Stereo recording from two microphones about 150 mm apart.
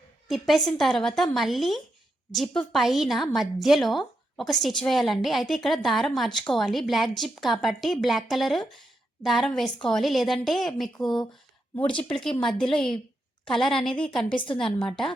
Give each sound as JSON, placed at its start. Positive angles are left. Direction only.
{"t": 0.3, "sound": "a woman's voice", "side_deg": 0}
{"t": 12.0, "sound": "a woman's voice", "side_deg": 5}
{"t": 14.4, "sound": "a woman's voice", "side_deg": 35}
{"t": 14.8, "sound": "a woman's voice", "side_deg": 5}